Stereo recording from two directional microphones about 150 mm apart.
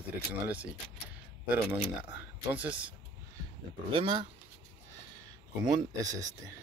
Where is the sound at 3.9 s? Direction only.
35° right (ahead or behind).